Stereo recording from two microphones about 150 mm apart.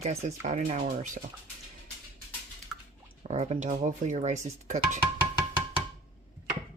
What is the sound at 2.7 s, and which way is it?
Music, 5° right (ahead or behind).